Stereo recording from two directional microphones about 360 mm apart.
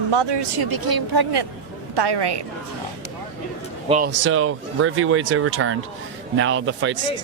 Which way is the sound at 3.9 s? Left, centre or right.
Right.